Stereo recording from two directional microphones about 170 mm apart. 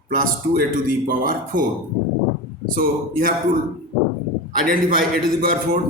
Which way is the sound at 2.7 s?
55° right (ahead or behind).